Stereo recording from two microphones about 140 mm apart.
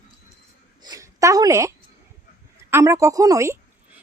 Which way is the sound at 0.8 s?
25° right (ahead or behind).